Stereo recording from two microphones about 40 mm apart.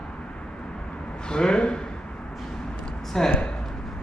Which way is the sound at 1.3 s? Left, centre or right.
Centre.